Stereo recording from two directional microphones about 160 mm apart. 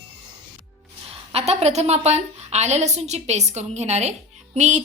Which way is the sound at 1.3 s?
40° right (ahead or behind).